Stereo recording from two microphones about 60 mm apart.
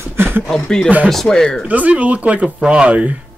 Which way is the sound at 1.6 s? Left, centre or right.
Right.